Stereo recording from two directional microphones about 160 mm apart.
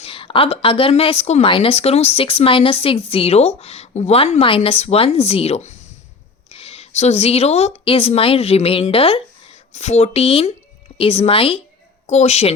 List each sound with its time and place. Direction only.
0.0 s a woman's voice: 35° left (ahead or behind)